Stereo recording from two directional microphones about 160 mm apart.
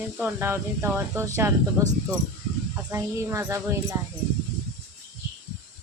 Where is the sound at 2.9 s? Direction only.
15° right (ahead or behind).